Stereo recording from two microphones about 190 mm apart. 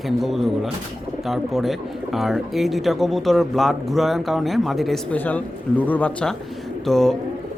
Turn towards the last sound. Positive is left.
turn(degrees=0)  # may be behind; listen again after turning